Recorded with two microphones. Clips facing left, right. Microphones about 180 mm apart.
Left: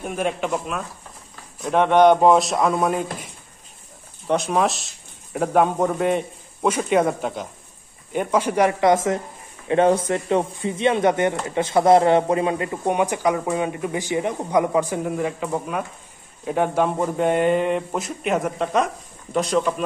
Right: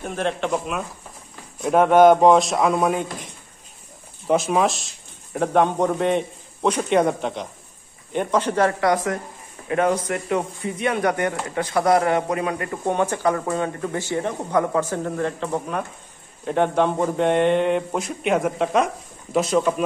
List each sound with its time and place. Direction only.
0.0 s speech: 10° left (ahead or behind)
4.3 s speech: centre (ahead or behind)